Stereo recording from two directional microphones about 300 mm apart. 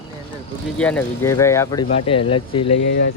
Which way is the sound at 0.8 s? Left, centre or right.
Centre.